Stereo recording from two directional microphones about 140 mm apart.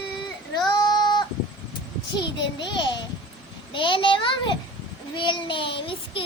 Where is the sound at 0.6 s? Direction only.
30° left (ahead or behind).